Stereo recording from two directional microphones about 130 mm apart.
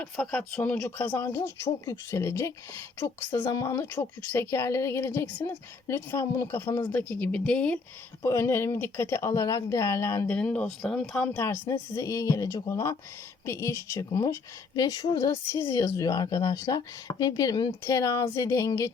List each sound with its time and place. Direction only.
0.0 s a woman's voice: 5° left (ahead or behind); by 6.7 s 20° left (ahead or behind)
6.7 s a woman's voice: 35° left (ahead or behind)
6.9 s speech: 10° left (ahead or behind)
8.2 s a woman's voice: 20° left (ahead or behind)
10.3 s speech: 10° left (ahead or behind)
11.7 s a woman's voice: 25° left (ahead or behind)